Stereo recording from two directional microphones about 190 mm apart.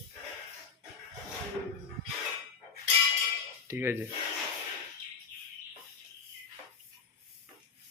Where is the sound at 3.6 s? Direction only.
15° right (ahead or behind).